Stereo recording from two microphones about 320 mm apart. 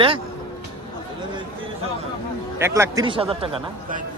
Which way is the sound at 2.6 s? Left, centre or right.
Centre.